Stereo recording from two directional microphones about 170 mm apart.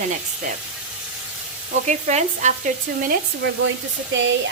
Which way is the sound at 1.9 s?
45° right (ahead or behind).